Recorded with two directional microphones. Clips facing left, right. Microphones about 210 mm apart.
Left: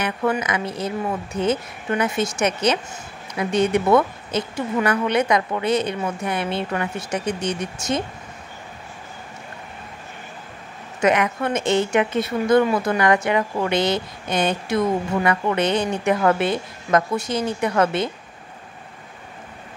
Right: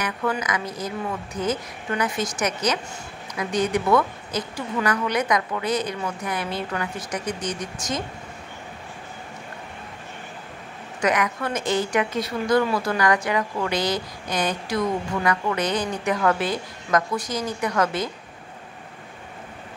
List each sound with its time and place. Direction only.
0.0 s a woman's voice: 25° left (ahead or behind)
11.0 s a woman's voice: 25° left (ahead or behind)